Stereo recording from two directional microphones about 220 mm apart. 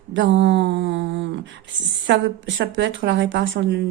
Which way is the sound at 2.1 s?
55° right (ahead or behind).